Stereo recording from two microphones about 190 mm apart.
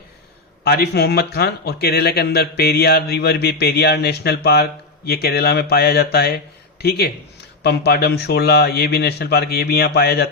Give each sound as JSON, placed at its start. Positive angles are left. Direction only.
{"t": 0.6, "sound": "speech", "side_deg": 55}